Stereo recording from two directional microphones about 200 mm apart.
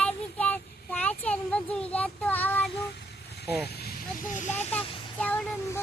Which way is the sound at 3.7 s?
55° left (ahead or behind).